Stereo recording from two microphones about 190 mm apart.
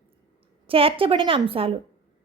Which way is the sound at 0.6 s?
30° right (ahead or behind).